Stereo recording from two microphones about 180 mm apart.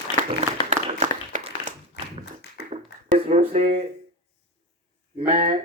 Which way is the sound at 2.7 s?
35° right (ahead or behind).